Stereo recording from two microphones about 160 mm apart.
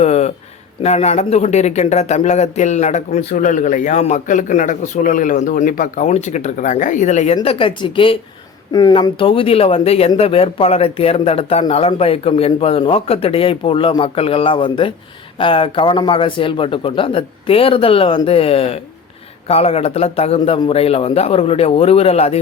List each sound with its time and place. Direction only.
0.0 s a sound: 40° left (ahead or behind)
0.8 s speech: 40° left (ahead or behind)
6.1 s speech: 45° left (ahead or behind)
7.4 s a man's voice: 30° left (ahead or behind)